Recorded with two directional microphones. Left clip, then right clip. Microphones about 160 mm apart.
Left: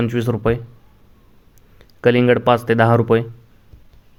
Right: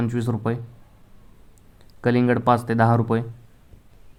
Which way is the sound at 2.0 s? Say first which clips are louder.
Left 7 dB; 30° left (ahead or behind).